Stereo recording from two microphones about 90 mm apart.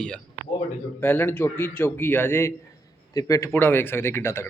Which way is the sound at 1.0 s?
20° left (ahead or behind).